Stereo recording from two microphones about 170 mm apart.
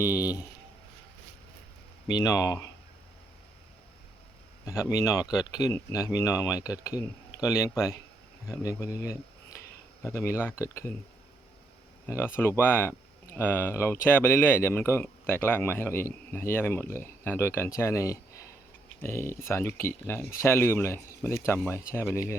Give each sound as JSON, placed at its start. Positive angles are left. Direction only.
{"t": 0.0, "sound": "speech", "side_deg": 20}
{"t": 2.1, "sound": "speech", "side_deg": 20}
{"t": 4.6, "sound": "a man's voice", "side_deg": 20}
{"t": 12.0, "sound": "speech", "side_deg": 15}